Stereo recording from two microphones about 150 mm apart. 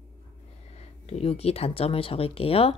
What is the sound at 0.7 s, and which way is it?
Speech, 45° left (ahead or behind).